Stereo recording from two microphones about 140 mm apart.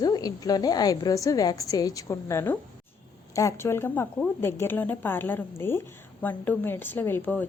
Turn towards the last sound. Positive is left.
turn(degrees=10)  # may be behind; listen again after turning